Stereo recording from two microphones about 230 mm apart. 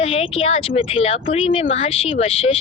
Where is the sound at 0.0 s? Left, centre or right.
Left.